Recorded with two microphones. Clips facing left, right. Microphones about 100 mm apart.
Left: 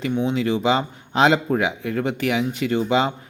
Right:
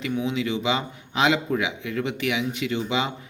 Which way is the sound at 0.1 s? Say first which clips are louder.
Left 4 dB; 35° left (ahead or behind).